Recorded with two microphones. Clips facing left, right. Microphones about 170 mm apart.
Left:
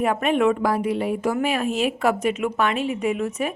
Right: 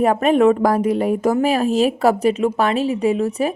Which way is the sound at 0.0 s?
40° right (ahead or behind).